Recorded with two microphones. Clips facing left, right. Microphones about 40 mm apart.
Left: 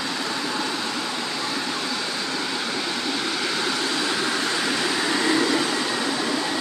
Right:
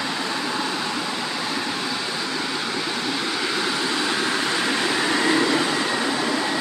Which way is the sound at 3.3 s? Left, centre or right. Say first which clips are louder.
Right 1 dB; centre.